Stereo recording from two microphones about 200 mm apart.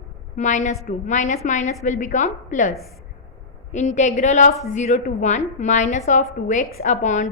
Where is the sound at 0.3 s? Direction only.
40° left (ahead or behind).